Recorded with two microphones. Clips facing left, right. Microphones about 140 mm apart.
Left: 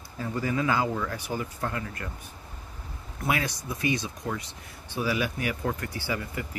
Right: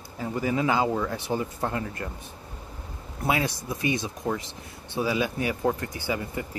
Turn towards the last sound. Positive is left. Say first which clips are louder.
# right 2 dB
turn(degrees=-20)  # may be behind; listen again after turning